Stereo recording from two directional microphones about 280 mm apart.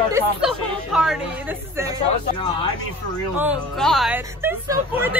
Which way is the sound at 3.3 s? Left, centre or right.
Centre.